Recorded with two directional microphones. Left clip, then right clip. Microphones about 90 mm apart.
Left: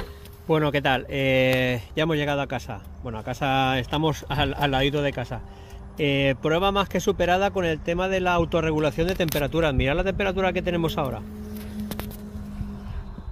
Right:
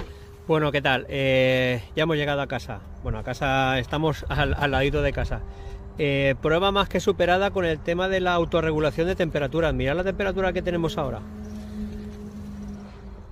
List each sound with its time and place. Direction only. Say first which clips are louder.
0.5 s speech: even; centre (ahead or behind)